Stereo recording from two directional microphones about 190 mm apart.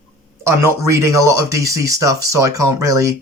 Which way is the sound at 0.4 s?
15° right (ahead or behind).